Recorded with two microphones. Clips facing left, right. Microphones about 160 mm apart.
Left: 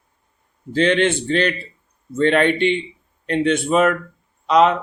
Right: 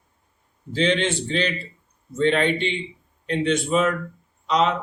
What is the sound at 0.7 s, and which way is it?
Speech, 60° left (ahead or behind).